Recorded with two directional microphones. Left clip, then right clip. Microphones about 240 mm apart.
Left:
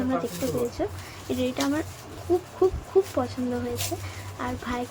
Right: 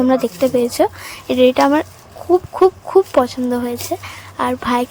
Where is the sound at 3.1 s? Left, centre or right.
Right.